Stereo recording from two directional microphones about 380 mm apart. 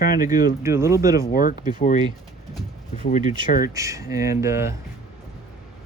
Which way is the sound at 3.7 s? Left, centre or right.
Centre.